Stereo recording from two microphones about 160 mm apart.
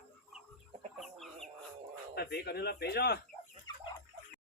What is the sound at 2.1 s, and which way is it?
Speech, 85° left.